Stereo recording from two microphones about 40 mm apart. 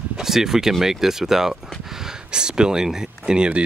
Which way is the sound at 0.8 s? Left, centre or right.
Centre.